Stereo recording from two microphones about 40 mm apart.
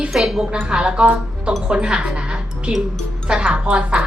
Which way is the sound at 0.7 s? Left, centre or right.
Right.